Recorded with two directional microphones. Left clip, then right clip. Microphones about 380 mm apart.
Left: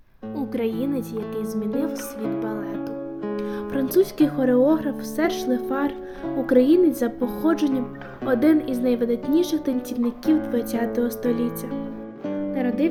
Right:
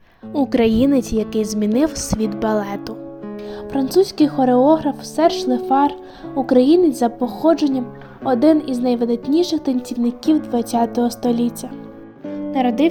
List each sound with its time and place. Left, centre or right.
0.3 s speech: right
3.2 s speech: centre
12.5 s speech: right